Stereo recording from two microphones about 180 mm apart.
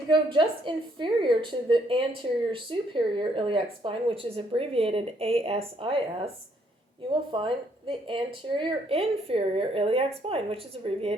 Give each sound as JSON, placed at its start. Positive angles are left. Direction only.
{"t": 0.1, "sound": "a woman's voice", "side_deg": -25}